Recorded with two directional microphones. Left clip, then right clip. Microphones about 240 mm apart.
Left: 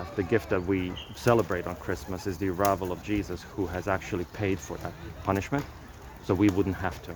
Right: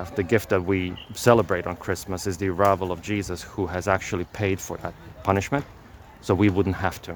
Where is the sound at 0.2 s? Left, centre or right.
Right.